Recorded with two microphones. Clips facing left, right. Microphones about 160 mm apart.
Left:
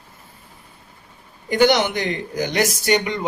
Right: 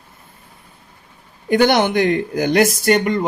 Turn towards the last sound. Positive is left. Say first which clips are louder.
# right 4 dB
turn(degrees=-50)  # may be behind; listen again after turning